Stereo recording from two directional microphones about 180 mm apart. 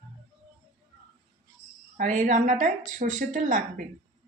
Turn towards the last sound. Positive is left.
turn(degrees=-45)  # may be behind; listen again after turning